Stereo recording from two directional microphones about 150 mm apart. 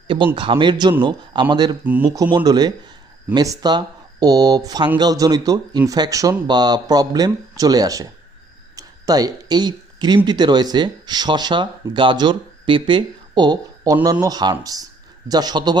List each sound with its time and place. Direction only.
0.3 s a man's voice: 35° right (ahead or behind)
1.8 s speech: 10° right (ahead or behind)
2.3 s speech: 25° right (ahead or behind)
8.7 s a sound: 25° right (ahead or behind)
10.2 s speech: 30° right (ahead or behind)